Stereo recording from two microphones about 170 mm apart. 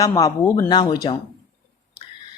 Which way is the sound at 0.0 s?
20° left (ahead or behind).